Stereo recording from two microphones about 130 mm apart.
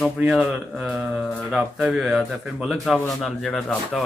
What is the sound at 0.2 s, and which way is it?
Speech, 10° right (ahead or behind).